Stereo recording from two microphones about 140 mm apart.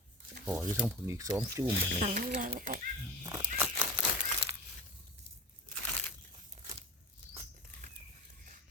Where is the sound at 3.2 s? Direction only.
25° right (ahead or behind).